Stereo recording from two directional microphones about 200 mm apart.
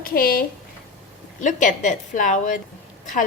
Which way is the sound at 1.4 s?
40° left (ahead or behind).